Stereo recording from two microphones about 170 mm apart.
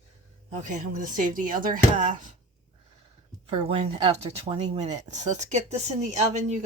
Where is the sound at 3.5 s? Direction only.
35° right (ahead or behind).